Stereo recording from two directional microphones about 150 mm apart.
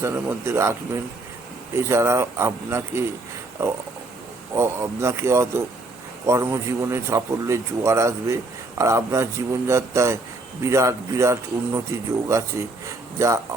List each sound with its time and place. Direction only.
0.0 s speech: 15° right (ahead or behind)
4.5 s speech: 20° right (ahead or behind)